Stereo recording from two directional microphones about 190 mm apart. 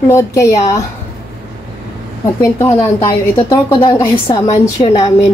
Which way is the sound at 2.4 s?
15° left (ahead or behind).